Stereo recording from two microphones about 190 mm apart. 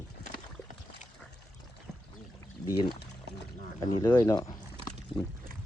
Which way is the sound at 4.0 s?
20° left (ahead or behind).